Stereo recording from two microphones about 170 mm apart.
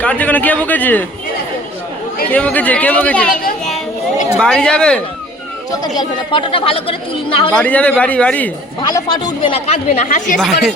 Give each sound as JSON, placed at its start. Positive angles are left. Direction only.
{"t": 0.0, "sound": "a man's voice", "side_deg": 10}
{"t": 2.3, "sound": "a man's voice", "side_deg": 10}
{"t": 4.4, "sound": "speech", "side_deg": 5}
{"t": 6.0, "sound": "a woman's voice", "side_deg": 30}
{"t": 7.5, "sound": "a man's voice", "side_deg": 5}
{"t": 8.8, "sound": "a woman's voice", "side_deg": 25}
{"t": 10.1, "sound": "speech", "side_deg": 50}
{"t": 10.3, "sound": "speech", "side_deg": 0}